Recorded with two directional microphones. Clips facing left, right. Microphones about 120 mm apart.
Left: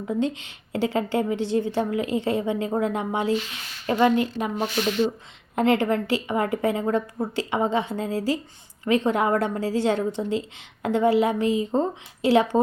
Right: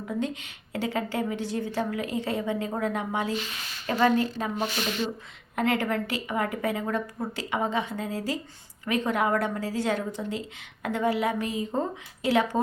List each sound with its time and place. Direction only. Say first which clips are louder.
0.1 s a woman's voice: left 5 dB; 25° left (ahead or behind)
5.5 s a woman's voice: left 5 dB; 25° left (ahead or behind)